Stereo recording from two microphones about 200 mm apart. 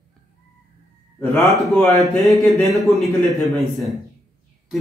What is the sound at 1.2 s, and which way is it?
Speech, 15° left (ahead or behind).